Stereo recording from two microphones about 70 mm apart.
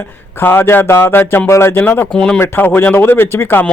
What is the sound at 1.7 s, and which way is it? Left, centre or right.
Speech, left.